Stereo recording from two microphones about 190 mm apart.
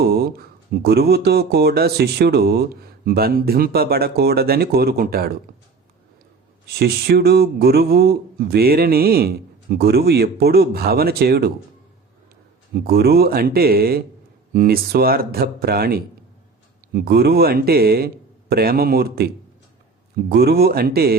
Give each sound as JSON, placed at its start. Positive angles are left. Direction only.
{"t": 0.0, "sound": "speech", "side_deg": -55}
{"t": 6.7, "sound": "speech", "side_deg": -55}
{"t": 12.7, "sound": "speech", "side_deg": -55}